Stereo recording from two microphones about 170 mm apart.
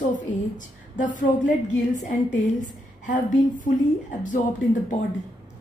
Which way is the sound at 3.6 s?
50° left (ahead or behind).